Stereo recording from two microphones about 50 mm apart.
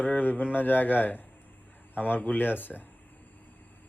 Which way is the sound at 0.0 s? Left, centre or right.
Left.